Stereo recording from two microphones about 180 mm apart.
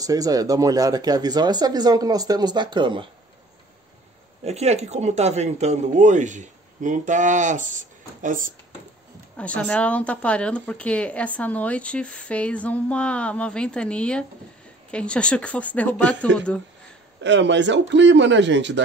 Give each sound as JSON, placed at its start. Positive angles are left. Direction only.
{"t": 0.0, "sound": "speech", "side_deg": -20}
{"t": 4.5, "sound": "speech", "side_deg": -35}
{"t": 9.4, "sound": "a woman's voice", "side_deg": 5}
{"t": 17.2, "sound": "a man's voice", "side_deg": -80}